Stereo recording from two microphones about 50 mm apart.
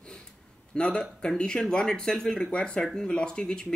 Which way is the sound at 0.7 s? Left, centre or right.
Centre.